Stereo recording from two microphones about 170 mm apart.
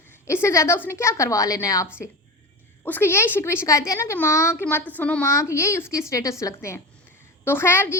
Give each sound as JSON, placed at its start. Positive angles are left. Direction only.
{"t": 0.3, "sound": "speech", "side_deg": 15}